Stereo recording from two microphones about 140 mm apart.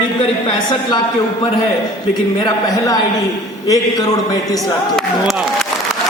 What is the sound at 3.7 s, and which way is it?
Speech, 25° left (ahead or behind).